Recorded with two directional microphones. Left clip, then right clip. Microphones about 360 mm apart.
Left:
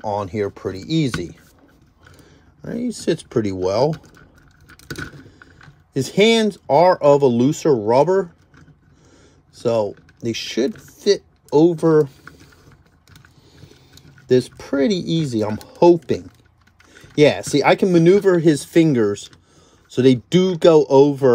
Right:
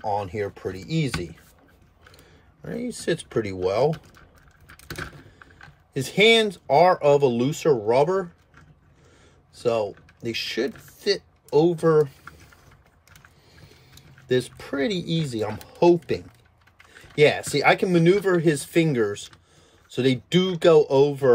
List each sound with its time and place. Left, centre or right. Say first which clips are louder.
0.0 s speech: left 4 dB; left
2.6 s speech: left 5 dB; centre
4.6 s keys jangling: left 4 dB; centre
6.1 s speech: left 2 dB; centre
9.6 s speech: left 4 dB; centre
14.4 s speech: left 7 dB; centre